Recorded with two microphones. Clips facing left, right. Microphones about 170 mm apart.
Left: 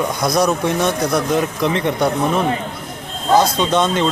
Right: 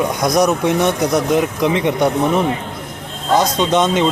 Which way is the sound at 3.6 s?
20° right (ahead or behind).